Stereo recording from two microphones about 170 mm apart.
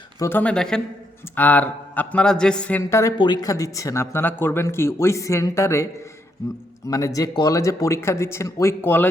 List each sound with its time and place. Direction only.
0.2 s speech: 10° left (ahead or behind)